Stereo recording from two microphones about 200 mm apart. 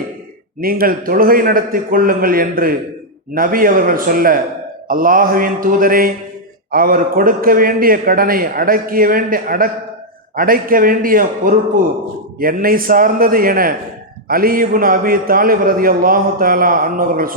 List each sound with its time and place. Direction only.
0.6 s a man's voice: 45° right (ahead or behind)